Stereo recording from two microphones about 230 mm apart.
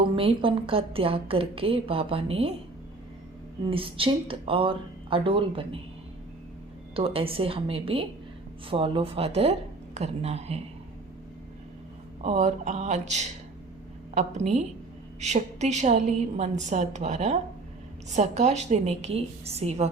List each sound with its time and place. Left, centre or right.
0.2 s a woman's voice: right
3.7 s a woman's voice: right
6.9 s a woman's voice: right
12.2 s a woman's voice: right